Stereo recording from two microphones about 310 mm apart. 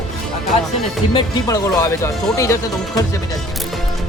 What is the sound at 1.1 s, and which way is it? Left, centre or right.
Speech, centre.